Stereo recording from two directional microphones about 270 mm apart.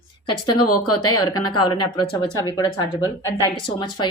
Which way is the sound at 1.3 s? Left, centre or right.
Centre.